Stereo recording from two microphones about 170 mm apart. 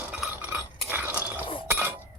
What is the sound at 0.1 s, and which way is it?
Chink, 10° right (ahead or behind).